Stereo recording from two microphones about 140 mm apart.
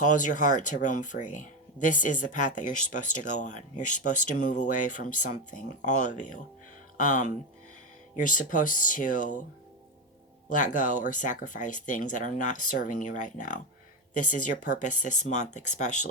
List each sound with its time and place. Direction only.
0.0 s speech: 65° left (ahead or behind)
10.5 s speech: 65° left (ahead or behind)